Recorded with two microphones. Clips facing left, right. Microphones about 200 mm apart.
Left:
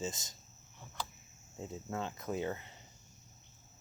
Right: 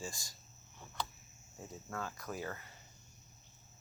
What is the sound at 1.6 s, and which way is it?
Speech, 20° left (ahead or behind).